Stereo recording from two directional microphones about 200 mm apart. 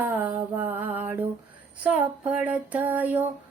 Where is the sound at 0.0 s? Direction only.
10° right (ahead or behind).